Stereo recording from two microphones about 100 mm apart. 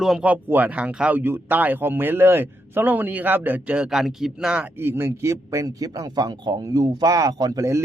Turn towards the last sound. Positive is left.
turn(degrees=-30)  # may be behind; listen again after turning